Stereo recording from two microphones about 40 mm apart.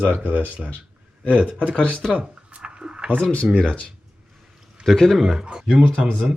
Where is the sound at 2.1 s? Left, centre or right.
Right.